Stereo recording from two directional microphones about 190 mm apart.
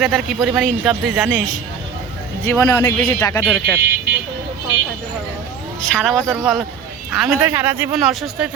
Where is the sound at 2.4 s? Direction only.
10° left (ahead or behind).